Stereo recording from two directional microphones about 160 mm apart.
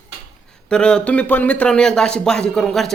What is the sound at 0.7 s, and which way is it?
Speech, 5° left (ahead or behind).